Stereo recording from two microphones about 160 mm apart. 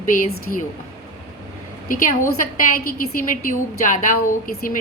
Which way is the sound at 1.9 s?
60° left (ahead or behind).